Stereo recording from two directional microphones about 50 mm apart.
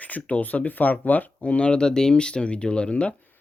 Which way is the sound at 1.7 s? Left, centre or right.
Centre.